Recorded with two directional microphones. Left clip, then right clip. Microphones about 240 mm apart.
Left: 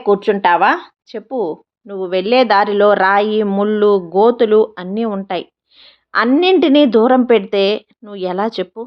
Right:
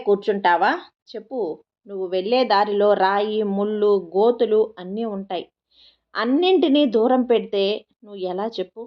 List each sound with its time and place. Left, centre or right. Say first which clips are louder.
0.0 s speech: left 6 dB; left